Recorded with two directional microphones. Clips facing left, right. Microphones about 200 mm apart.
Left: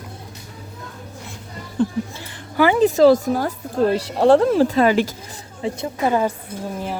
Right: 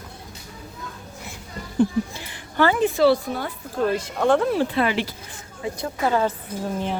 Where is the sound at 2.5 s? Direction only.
10° left (ahead or behind).